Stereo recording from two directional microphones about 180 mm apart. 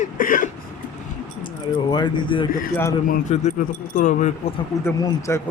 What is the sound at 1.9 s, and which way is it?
Speech, 25° left (ahead or behind).